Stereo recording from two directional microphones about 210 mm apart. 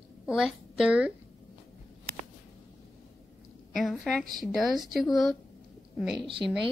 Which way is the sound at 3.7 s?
Centre (ahead or behind).